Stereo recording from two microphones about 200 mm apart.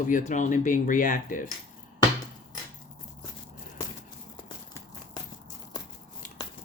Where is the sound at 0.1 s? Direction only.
40° left (ahead or behind).